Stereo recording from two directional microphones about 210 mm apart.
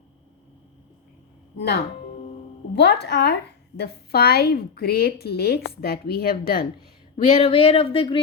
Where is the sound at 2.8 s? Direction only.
55° left (ahead or behind).